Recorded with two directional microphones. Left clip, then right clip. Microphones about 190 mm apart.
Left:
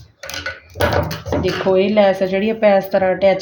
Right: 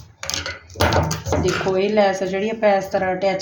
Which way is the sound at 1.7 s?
45° left (ahead or behind).